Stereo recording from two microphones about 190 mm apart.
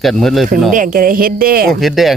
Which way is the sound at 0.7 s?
45° right (ahead or behind).